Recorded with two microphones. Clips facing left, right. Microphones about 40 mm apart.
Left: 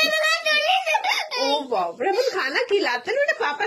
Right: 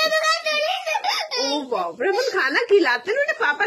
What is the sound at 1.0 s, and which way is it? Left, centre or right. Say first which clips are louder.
Giggle: left 1 dB; left.